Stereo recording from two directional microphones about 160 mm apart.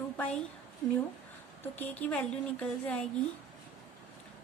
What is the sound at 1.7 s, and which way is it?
Speech, 10° left (ahead or behind).